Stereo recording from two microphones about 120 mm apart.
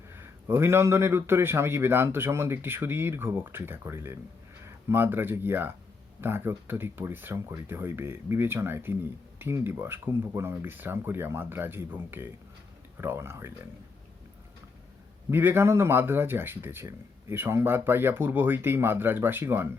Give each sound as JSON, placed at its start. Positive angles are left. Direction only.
{"t": 0.1, "sound": "speech", "side_deg": -20}
{"t": 15.3, "sound": "speech", "side_deg": -20}